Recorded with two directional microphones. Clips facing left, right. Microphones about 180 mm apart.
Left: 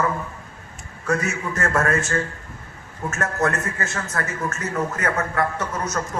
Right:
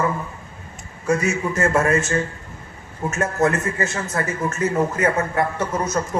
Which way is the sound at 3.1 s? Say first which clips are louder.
Right 3 dB; 20° right (ahead or behind).